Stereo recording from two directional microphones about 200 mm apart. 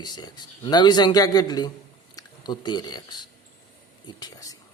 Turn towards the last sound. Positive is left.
turn(degrees=20)  # may be behind; listen again after turning